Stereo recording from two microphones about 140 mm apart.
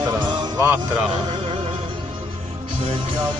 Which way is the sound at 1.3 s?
40° right (ahead or behind).